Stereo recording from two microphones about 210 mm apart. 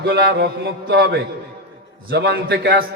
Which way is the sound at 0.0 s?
50° right (ahead or behind).